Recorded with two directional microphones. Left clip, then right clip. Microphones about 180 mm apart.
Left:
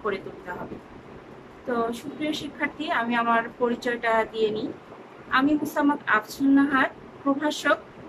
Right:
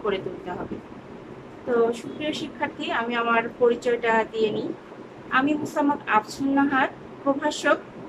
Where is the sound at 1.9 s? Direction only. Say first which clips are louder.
Right 2 dB; 5° right (ahead or behind).